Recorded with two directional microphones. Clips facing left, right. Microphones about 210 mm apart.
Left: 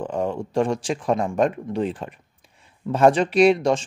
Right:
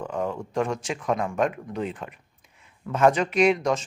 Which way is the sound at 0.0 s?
30° left (ahead or behind).